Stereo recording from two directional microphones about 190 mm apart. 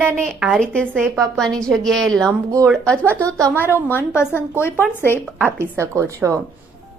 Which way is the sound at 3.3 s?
15° right (ahead or behind).